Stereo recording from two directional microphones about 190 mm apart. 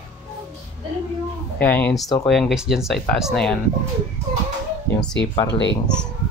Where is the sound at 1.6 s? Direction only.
10° left (ahead or behind).